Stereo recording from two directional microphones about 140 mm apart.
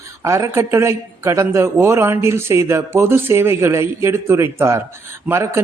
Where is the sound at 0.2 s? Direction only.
20° right (ahead or behind).